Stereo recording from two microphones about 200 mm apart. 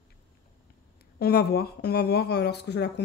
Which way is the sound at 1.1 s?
50° left (ahead or behind).